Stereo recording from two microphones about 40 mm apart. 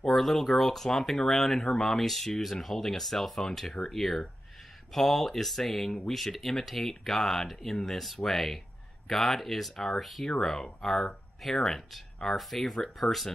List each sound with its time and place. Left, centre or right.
0.0 s speech: centre
10.6 s speech: centre
12.4 s speech: centre